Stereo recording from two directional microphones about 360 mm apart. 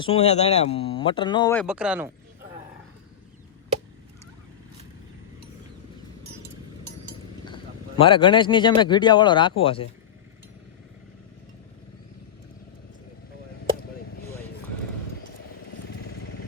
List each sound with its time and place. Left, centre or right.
0.0 s speech: centre
1.6 s speech: centre
7.4 s speech: centre